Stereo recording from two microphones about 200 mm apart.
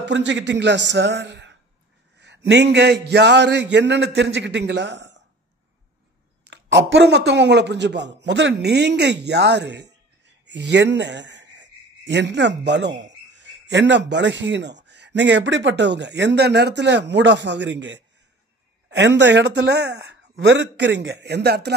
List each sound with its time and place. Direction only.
0.0 s speech: 60° right (ahead or behind)
6.5 s speech: 60° right (ahead or behind)